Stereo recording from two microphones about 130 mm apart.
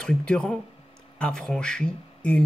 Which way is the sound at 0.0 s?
5° left (ahead or behind).